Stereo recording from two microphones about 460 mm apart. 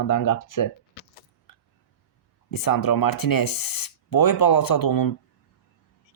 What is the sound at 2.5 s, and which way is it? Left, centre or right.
Speech, left.